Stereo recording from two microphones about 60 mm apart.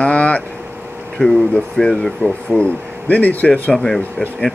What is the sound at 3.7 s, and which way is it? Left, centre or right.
Speech, centre.